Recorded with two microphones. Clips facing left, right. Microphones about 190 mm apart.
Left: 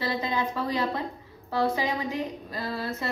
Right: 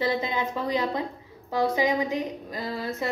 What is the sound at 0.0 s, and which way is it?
A woman's voice, 20° right (ahead or behind).